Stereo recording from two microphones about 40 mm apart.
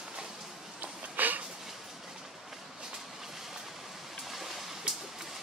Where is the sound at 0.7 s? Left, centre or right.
Right.